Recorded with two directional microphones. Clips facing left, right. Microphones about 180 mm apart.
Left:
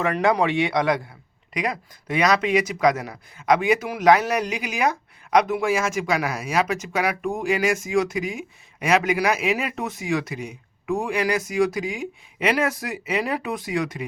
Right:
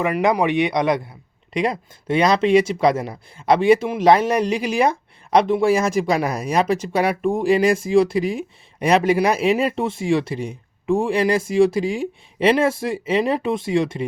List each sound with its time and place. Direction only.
0.0 s speech: 15° right (ahead or behind)